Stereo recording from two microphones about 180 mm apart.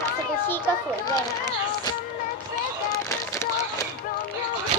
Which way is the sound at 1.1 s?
20° left (ahead or behind).